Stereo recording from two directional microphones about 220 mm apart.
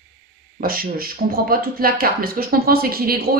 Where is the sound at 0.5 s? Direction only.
40° right (ahead or behind).